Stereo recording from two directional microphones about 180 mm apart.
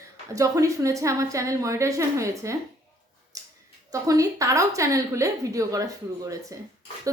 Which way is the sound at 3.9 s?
20° right (ahead or behind).